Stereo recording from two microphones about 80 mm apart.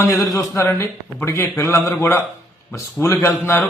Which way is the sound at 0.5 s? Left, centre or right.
Left.